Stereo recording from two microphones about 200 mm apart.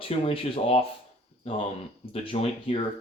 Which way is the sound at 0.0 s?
30° left (ahead or behind).